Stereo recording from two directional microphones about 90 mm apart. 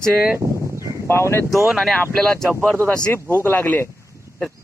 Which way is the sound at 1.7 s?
Centre (ahead or behind).